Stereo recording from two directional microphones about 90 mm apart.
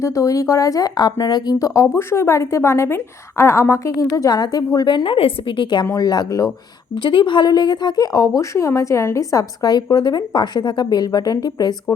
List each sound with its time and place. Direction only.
0.0 s speech: 35° left (ahead or behind); by 5.8 s 70° left (ahead or behind)
5.8 s speech: 45° left (ahead or behind)
6.9 s speech: 65° left (ahead or behind); by 11.7 s 45° left (ahead or behind)